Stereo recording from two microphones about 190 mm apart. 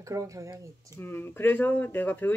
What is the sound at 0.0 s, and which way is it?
Speech, 15° right (ahead or behind).